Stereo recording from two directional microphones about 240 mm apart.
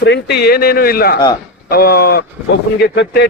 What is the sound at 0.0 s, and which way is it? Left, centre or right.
A man's voice, left.